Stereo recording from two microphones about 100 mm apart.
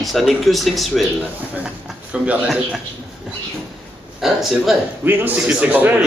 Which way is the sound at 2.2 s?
15° right (ahead or behind).